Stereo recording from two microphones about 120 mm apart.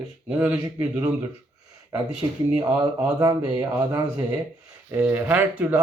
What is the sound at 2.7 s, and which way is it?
Speech, 15° right (ahead or behind).